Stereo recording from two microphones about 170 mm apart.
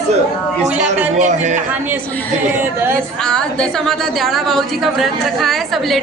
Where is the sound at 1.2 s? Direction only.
45° right (ahead or behind).